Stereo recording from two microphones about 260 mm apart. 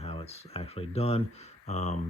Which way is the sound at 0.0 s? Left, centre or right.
Left.